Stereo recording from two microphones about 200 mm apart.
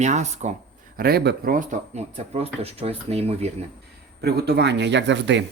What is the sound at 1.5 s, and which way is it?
Speech, 35° right (ahead or behind).